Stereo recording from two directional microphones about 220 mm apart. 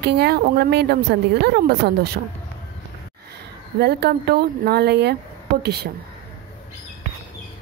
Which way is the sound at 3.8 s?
50° right (ahead or behind).